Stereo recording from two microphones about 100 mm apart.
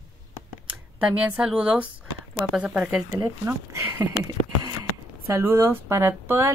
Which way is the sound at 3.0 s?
25° right (ahead or behind).